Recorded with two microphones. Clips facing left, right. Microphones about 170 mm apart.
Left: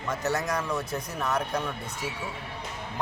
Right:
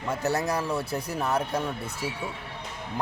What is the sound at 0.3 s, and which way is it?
Speech, 30° right (ahead or behind).